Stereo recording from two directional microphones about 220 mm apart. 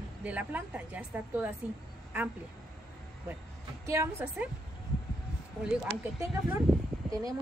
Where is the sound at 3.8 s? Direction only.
10° right (ahead or behind).